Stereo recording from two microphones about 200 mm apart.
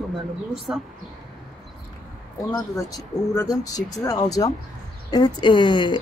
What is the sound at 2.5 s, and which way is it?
Speech, 15° left (ahead or behind).